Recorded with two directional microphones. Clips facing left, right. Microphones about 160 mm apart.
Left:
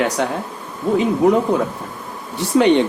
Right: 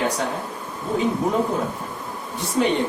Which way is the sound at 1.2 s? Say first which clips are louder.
Left 7 dB; 80° left.